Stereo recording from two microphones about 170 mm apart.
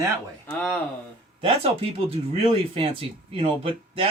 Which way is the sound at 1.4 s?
35° right (ahead or behind).